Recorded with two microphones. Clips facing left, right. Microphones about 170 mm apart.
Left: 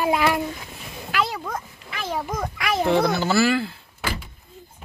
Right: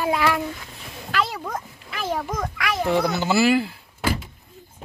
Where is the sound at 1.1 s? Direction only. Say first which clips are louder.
Even; centre (ahead or behind).